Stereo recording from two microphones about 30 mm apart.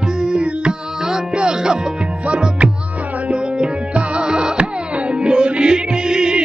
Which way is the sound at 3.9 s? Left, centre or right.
Right.